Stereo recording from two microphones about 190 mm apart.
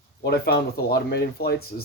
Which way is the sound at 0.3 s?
55° left (ahead or behind).